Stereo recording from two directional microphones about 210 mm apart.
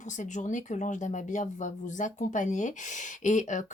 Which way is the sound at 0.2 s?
35° left (ahead or behind).